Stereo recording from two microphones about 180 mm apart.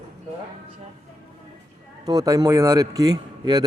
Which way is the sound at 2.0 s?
20° right (ahead or behind).